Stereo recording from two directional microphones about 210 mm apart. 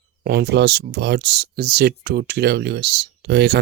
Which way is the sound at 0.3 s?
50° right (ahead or behind).